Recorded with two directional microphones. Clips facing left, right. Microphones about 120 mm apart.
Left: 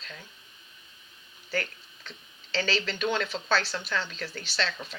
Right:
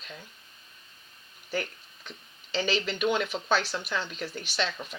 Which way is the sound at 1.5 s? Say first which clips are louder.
Even; 15° right (ahead or behind).